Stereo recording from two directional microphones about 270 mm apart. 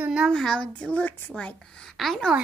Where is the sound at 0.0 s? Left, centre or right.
Centre.